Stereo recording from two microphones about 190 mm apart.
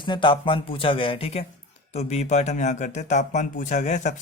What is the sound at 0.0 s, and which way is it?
Speech, 25° left (ahead or behind).